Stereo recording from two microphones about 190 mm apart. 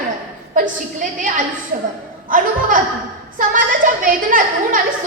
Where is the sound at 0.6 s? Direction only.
45° right (ahead or behind).